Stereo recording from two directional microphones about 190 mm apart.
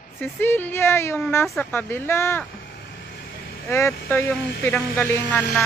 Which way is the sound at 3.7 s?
15° left (ahead or behind).